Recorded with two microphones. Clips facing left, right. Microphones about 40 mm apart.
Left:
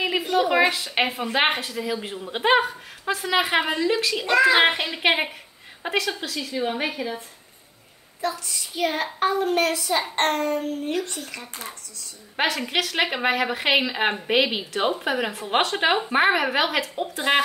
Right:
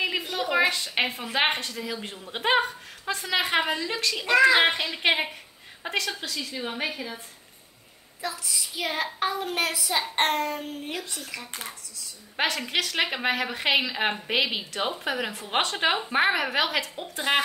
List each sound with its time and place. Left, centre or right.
0.2 s a sound: centre
0.7 s a woman's voice: centre
6.5 s a woman's voice: centre
8.2 s a child's voice: centre
11.1 s a child's voice: centre
17.3 s speech: left